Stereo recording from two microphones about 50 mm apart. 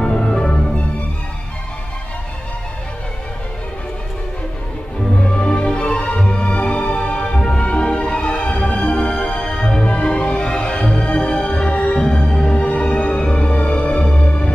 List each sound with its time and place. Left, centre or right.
0.0 s music: centre
5.1 s music: left